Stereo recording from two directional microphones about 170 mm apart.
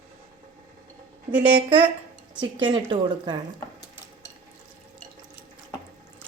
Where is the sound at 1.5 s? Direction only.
30° right (ahead or behind).